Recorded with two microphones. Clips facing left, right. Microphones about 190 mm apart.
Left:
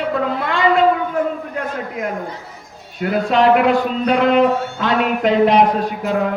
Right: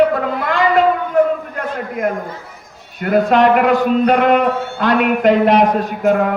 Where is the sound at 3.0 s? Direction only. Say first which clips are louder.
Right 3 dB; 50° right (ahead or behind).